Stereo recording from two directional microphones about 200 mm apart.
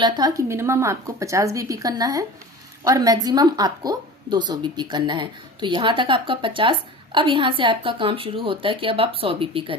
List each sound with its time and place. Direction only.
0.0 s a woman's voice: 20° right (ahead or behind)